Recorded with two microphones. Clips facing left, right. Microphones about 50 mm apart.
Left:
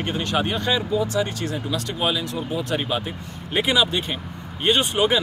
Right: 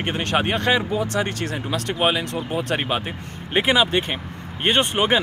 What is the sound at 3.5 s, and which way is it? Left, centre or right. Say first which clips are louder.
Speech: right 2 dB; right.